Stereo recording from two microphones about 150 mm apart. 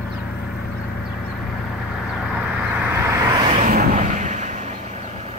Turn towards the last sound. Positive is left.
turn(degrees=-50)  # may be behind; listen again after turning